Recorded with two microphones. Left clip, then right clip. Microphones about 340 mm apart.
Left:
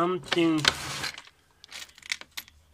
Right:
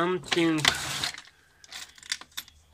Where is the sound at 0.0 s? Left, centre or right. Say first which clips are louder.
Even; centre.